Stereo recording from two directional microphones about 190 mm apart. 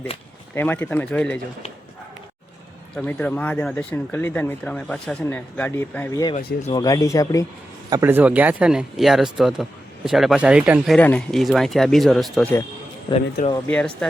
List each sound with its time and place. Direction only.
0.5 s speech: 10° left (ahead or behind)
2.9 s speech: 5° left (ahead or behind)
7.9 s speech: 15° right (ahead or behind); by 12.5 s centre (ahead or behind)
13.1 s speech: 20° left (ahead or behind)
13.7 s speech: 5° left (ahead or behind)